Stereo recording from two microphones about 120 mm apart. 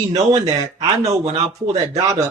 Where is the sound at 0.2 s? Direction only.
30° right (ahead or behind).